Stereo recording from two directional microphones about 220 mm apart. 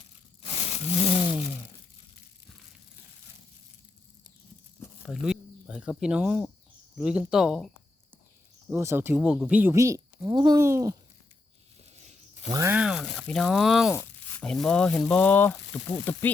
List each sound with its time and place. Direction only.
0.7 s a sound: 30° left (ahead or behind)
4.8 s a sound: centre (ahead or behind)
6.9 s speech: 5° right (ahead or behind)
8.7 s speech: 10° right (ahead or behind)
12.5 s speech: 15° right (ahead or behind)
13.9 s speech: 10° left (ahead or behind)